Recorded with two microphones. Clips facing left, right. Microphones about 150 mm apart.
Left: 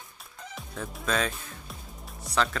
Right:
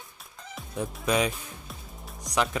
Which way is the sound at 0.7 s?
15° right (ahead or behind).